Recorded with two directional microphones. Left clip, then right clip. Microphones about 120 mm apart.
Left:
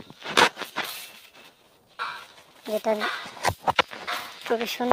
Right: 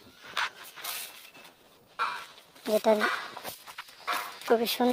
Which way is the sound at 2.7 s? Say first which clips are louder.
Right 1 dB; 35° right (ahead or behind).